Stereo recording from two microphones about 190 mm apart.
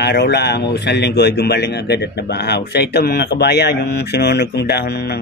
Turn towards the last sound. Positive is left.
turn(degrees=60)  # may be behind; listen again after turning